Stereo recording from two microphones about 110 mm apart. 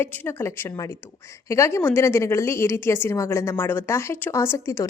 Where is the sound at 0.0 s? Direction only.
20° left (ahead or behind).